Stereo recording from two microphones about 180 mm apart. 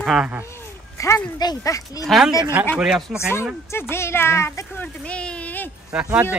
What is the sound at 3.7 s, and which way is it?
Speech, 15° left (ahead or behind).